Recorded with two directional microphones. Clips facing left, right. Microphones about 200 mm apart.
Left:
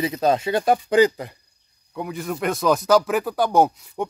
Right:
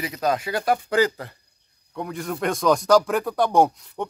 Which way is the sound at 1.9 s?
5° left (ahead or behind).